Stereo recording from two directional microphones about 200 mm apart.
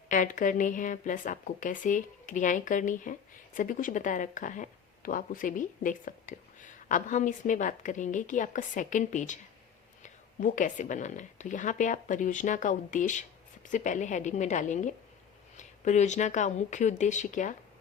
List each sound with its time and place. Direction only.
0.1 s a woman's voice: 40° left (ahead or behind)